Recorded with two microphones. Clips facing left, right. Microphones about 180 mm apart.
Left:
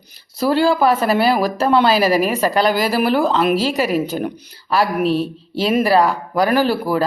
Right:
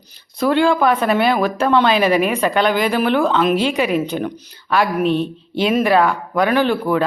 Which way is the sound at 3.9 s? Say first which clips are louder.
Even; 45° left (ahead or behind).